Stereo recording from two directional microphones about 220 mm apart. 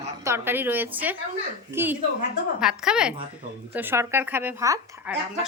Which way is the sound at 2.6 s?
5° right (ahead or behind).